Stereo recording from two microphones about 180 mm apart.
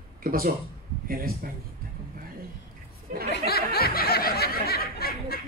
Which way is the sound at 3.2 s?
60° left (ahead or behind).